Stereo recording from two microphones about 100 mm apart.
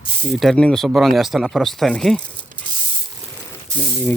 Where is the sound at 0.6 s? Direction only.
5° left (ahead or behind).